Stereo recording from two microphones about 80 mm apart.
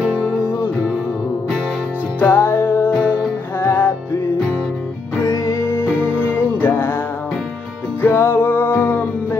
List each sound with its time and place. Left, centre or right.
0.0 s music: centre
0.5 s music: left
2.1 s music: left
3.0 s music: centre
3.5 s music: left
5.2 s music: left
8.0 s music: left